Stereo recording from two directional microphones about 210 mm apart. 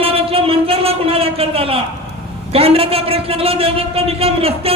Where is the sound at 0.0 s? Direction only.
25° right (ahead or behind).